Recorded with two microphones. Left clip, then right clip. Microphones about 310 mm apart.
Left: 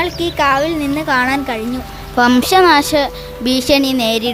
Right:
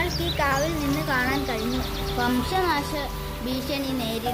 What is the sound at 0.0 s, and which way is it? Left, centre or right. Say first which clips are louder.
Speech: left 10 dB; left.